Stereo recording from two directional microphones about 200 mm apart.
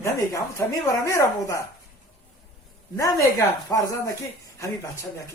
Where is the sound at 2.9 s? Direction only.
15° left (ahead or behind).